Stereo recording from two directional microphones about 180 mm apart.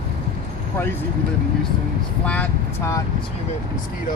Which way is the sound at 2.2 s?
10° left (ahead or behind).